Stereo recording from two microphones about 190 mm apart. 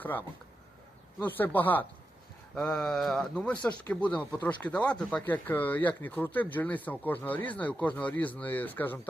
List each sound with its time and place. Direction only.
0.0 s speech: 10° left (ahead or behind)